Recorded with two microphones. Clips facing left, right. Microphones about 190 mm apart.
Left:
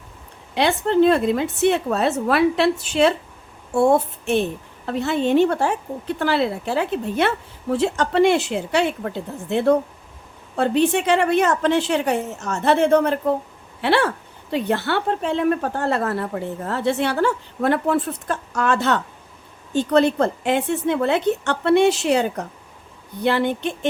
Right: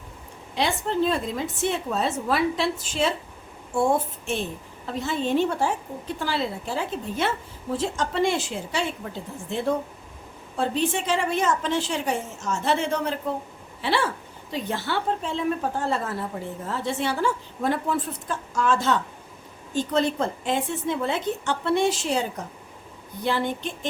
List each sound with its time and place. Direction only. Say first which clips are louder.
0.5 s a woman's voice: left 7 dB; 65° left (ahead or behind)